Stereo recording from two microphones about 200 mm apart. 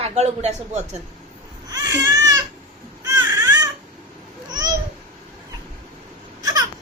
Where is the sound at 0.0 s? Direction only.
35° right (ahead or behind).